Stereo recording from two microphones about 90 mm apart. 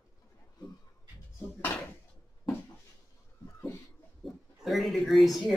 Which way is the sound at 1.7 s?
25° left (ahead or behind).